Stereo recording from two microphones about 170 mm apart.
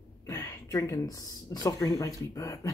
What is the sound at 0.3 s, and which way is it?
Speech, 20° left (ahead or behind).